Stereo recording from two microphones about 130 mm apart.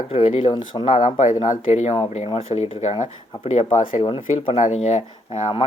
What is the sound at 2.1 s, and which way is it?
Speech, 55° left (ahead or behind).